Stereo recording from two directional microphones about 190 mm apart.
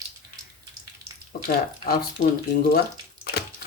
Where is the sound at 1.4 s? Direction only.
50° left (ahead or behind).